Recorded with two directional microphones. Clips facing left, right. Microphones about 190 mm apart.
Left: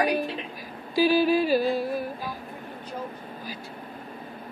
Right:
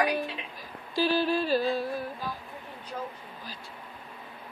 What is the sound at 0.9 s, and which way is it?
Music, 10° left (ahead or behind).